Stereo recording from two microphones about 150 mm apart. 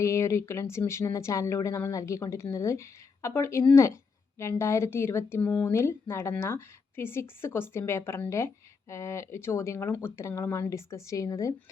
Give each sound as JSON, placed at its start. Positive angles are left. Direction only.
{"t": 0.0, "sound": "speech", "side_deg": 20}